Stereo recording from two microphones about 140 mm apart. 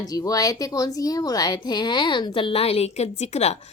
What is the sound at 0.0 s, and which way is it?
A woman's voice, 25° left (ahead or behind).